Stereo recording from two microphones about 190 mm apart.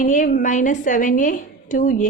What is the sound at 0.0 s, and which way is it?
A woman's voice, 45° left (ahead or behind).